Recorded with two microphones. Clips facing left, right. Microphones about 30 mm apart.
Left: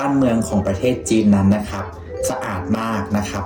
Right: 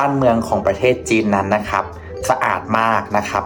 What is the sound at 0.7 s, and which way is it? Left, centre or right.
Speech, right.